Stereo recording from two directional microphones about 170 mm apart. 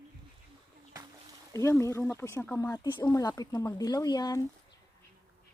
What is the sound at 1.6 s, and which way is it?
Speech, 15° left (ahead or behind).